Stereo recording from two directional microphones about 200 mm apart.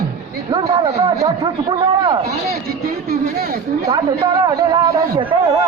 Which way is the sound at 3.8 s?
20° right (ahead or behind).